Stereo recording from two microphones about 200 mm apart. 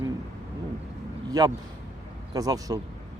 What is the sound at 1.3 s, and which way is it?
A man's voice, 20° right (ahead or behind).